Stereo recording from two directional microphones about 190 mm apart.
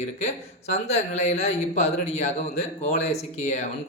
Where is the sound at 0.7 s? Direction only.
35° left (ahead or behind).